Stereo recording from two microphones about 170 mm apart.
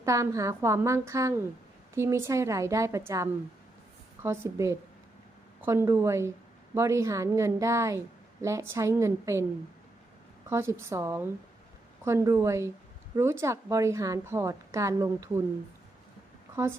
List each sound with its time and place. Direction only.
0.0 s a woman's voice: 20° right (ahead or behind)
10.5 s a woman's voice: 15° right (ahead or behind)